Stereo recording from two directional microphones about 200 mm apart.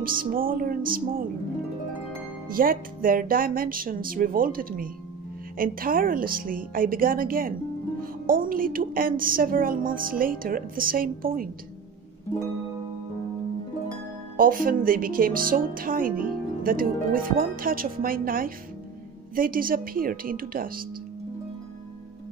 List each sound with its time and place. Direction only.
0.0 s speech: 45° right (ahead or behind)
2.5 s speech: 45° right (ahead or behind)
14.3 s speech: 45° right (ahead or behind)